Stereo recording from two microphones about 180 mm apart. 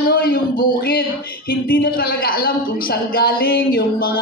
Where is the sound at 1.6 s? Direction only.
55° left (ahead or behind).